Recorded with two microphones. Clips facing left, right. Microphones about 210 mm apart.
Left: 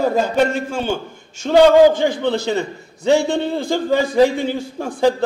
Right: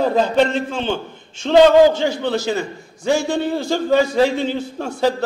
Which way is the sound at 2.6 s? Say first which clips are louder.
Left 2 dB; 60° left (ahead or behind).